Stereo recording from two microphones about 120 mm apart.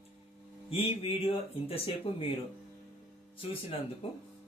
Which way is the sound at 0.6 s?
55° left (ahead or behind).